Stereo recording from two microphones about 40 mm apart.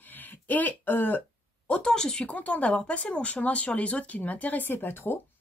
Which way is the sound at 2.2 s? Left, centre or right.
Left.